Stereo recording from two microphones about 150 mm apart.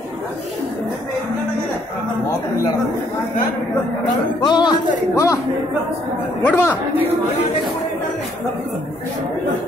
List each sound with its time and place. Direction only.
4.4 s a man's voice: 30° left (ahead or behind)
6.4 s speech: 15° left (ahead or behind)